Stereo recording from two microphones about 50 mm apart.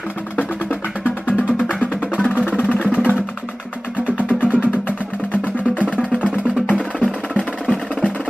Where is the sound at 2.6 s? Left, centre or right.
Left.